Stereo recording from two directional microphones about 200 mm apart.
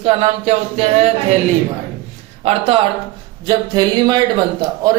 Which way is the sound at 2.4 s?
30° right (ahead or behind).